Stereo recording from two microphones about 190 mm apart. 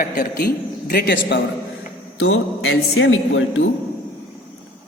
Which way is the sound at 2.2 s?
90° left.